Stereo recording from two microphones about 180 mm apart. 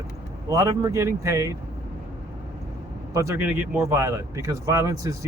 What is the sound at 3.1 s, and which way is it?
A man's voice, 15° right (ahead or behind).